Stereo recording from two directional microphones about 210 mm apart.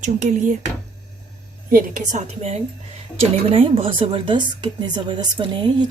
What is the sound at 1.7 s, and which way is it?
A woman's voice, 35° right (ahead or behind).